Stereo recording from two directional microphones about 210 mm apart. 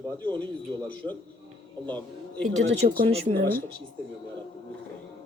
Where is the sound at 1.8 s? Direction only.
5° left (ahead or behind).